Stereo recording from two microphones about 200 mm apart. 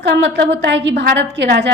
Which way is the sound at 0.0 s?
60° right (ahead or behind).